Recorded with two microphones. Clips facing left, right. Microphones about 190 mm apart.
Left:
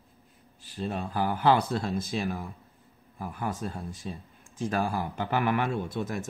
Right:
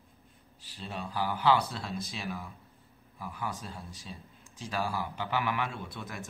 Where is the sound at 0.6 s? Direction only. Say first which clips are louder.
Left 7 dB; 50° left (ahead or behind).